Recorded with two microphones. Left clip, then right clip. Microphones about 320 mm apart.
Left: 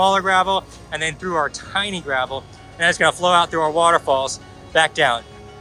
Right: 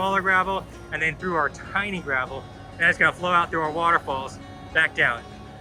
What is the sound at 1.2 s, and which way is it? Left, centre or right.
Speech, centre.